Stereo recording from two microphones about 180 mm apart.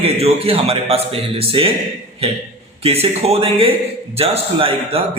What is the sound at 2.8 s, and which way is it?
A man's voice, 35° right (ahead or behind).